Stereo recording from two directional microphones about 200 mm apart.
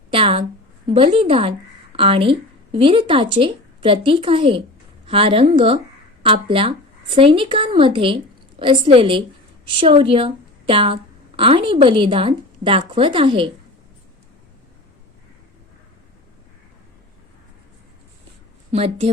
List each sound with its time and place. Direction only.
0.1 s a sound: 30° right (ahead or behind)
0.9 s a woman's voice: 25° right (ahead or behind)
18.7 s a woman's voice: 30° right (ahead or behind)